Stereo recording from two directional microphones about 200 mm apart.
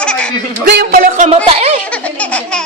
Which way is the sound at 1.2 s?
30° right (ahead or behind).